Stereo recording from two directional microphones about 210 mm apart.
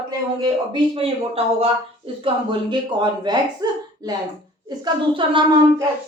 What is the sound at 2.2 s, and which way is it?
Speech, 20° right (ahead or behind).